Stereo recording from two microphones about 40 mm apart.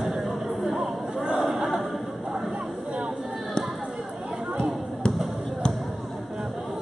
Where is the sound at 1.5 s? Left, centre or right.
Centre.